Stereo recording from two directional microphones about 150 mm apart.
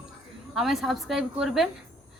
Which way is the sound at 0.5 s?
Centre (ahead or behind).